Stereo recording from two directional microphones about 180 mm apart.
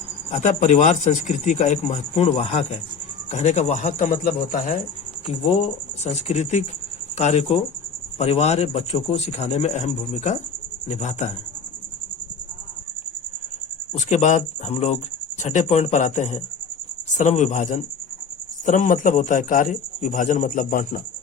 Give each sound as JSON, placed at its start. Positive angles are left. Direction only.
{"t": 0.3, "sound": "speech", "side_deg": 40}
{"t": 6.0, "sound": "speech", "side_deg": 35}
{"t": 14.0, "sound": "a man's voice", "side_deg": 40}